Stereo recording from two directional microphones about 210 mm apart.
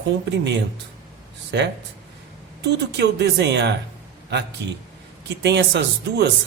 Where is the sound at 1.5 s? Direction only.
55° right (ahead or behind).